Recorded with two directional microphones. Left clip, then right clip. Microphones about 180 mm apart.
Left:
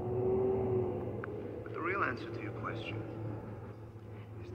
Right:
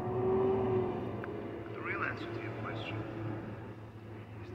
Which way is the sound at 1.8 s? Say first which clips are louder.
Left 3 dB; 45° left (ahead or behind).